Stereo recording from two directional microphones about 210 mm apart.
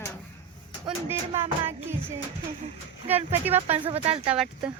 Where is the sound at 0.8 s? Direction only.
10° right (ahead or behind).